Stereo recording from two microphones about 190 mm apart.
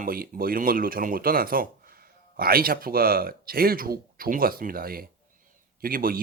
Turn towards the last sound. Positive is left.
turn(degrees=-50)  # may be behind; listen again after turning